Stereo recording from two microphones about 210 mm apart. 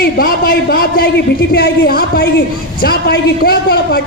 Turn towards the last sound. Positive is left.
turn(degrees=50)  # may be behind; listen again after turning